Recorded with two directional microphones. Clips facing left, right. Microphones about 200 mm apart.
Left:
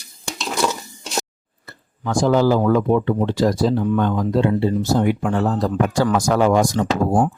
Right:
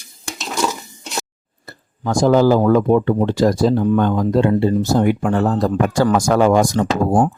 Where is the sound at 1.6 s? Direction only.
35° right (ahead or behind).